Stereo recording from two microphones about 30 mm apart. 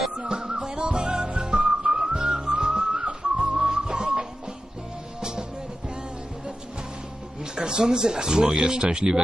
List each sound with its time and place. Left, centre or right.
0.2 s music: right
7.5 s speech: right